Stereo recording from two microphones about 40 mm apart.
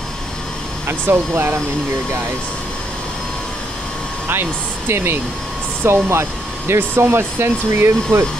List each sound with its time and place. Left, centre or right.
0.8 s speech: right
4.3 s speech: right